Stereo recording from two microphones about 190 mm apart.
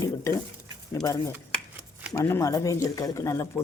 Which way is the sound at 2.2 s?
15° left (ahead or behind).